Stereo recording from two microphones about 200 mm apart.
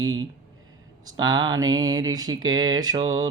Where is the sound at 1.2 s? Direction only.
20° right (ahead or behind).